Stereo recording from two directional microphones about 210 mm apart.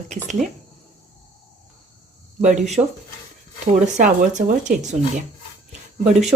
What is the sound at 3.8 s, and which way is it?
A woman's voice, 35° right (ahead or behind).